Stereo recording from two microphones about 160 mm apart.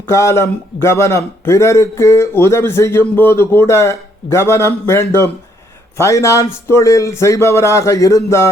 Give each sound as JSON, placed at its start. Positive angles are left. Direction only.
{"t": 0.1, "sound": "a man's voice", "side_deg": 20}